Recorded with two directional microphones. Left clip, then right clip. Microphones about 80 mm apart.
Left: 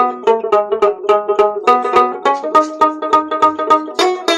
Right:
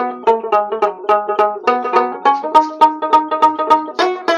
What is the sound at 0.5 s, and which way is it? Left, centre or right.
Banjo, right.